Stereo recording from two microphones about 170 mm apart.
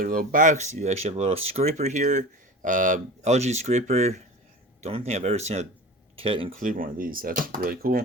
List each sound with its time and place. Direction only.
0.0 s speech: 55° right (ahead or behind); by 6.5 s 30° right (ahead or behind)
6.6 s speech: 55° right (ahead or behind)